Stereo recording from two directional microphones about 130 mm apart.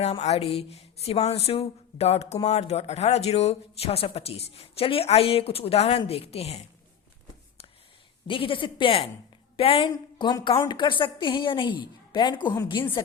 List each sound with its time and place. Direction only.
0.0 s speech: 55° left (ahead or behind)
8.3 s speech: 40° left (ahead or behind)
9.9 s a woman's voice: 30° left (ahead or behind)